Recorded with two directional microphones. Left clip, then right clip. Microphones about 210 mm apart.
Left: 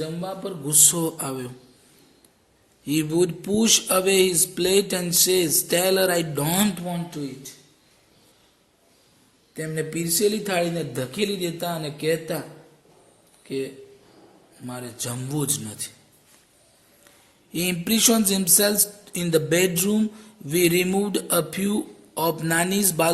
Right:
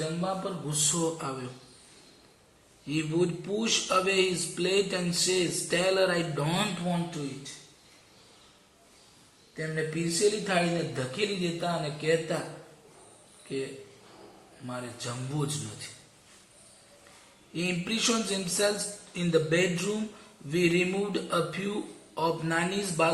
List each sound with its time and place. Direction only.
0.2 s speech: 50° left (ahead or behind)
2.8 s speech: 55° left (ahead or behind)
9.6 s speech: 55° left (ahead or behind)
13.5 s speech: 55° left (ahead or behind)
14.7 s speech: 55° left (ahead or behind)
17.5 s speech: 55° left (ahead or behind)